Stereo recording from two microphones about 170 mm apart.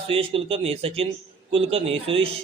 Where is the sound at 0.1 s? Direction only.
35° right (ahead or behind).